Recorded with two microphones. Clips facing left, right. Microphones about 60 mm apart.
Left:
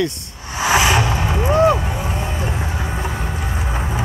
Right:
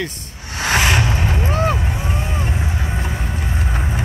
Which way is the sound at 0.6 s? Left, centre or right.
Centre.